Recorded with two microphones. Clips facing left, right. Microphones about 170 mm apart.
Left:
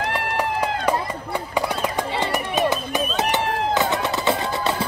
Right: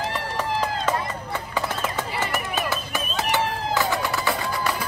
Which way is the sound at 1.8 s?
20° left (ahead or behind).